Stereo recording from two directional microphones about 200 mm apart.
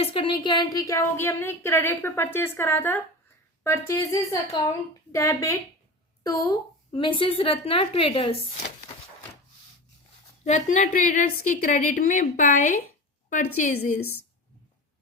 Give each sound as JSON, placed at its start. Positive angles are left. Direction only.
{"t": 0.0, "sound": "a woman's voice", "side_deg": 25}
{"t": 10.4, "sound": "a woman's voice", "side_deg": 35}